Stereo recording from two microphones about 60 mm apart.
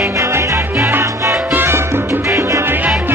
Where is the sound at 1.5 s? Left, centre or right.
Right.